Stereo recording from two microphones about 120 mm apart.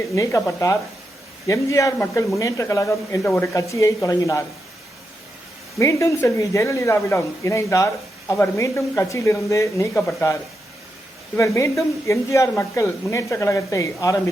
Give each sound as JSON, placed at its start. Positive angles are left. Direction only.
{"t": 0.2, "sound": "speech", "side_deg": 25}
{"t": 5.8, "sound": "speech", "side_deg": 25}